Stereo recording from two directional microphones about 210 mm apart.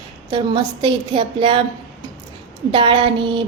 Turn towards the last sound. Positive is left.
turn(degrees=-25)  # may be behind; listen again after turning